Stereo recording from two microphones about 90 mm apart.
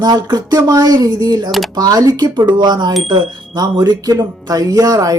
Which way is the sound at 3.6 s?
45° right (ahead or behind).